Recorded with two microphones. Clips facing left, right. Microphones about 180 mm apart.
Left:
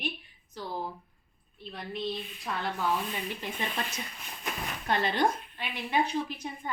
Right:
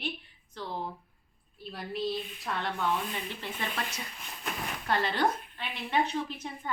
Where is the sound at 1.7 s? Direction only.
5° right (ahead or behind).